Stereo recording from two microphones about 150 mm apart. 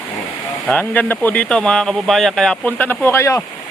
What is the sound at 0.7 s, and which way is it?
Speech, 10° left (ahead or behind).